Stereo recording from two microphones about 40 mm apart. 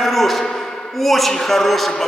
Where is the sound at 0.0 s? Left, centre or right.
Centre.